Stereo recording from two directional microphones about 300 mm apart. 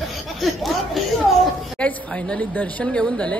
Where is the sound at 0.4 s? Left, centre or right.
Centre.